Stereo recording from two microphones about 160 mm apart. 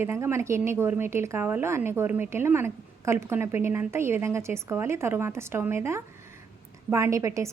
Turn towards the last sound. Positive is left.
turn(degrees=-20)  # may be behind; listen again after turning